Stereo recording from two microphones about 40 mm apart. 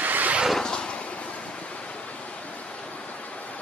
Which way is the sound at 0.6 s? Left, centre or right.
Left.